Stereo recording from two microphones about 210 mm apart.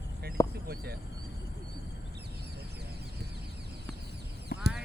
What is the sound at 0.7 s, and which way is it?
Speech, 45° right (ahead or behind).